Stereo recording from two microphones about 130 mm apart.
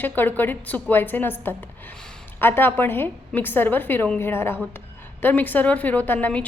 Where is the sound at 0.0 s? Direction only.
15° left (ahead or behind).